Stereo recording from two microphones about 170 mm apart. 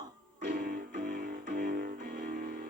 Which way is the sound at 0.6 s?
55° right (ahead or behind).